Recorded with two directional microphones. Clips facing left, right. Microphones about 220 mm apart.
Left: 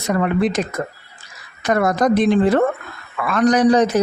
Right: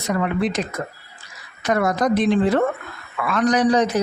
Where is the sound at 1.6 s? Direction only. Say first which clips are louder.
Left 3 dB; 50° left (ahead or behind).